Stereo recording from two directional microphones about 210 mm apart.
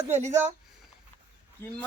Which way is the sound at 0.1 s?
35° right (ahead or behind).